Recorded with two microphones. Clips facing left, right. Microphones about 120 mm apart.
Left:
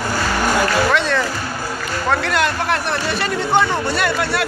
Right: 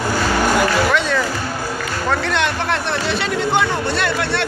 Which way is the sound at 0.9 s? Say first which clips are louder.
Even; centre (ahead or behind).